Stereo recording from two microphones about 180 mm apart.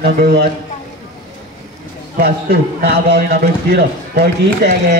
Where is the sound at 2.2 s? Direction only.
60° right (ahead or behind).